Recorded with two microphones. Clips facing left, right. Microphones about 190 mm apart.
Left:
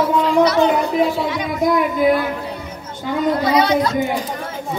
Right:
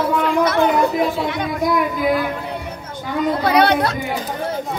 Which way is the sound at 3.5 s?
60° right (ahead or behind).